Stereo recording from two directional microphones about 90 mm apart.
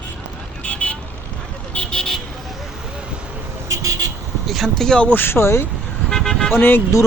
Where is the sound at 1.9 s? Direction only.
5° left (ahead or behind).